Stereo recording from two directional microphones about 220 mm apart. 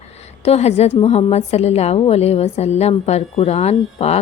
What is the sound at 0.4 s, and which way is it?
A woman's voice, 30° left (ahead or behind).